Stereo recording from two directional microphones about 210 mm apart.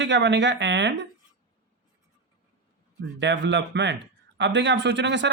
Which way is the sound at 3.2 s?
55° right (ahead or behind).